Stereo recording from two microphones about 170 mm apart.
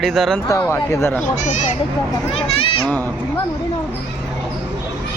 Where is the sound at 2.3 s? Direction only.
30° left (ahead or behind).